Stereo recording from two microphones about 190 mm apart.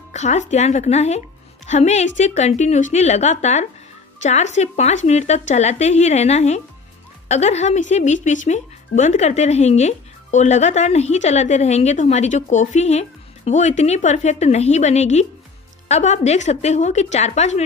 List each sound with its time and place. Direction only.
0.1 s speech: 35° left (ahead or behind)